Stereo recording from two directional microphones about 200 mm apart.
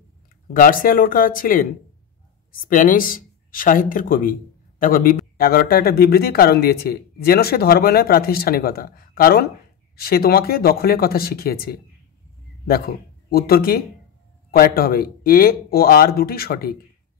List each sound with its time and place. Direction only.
0.5 s speech: 45° left (ahead or behind)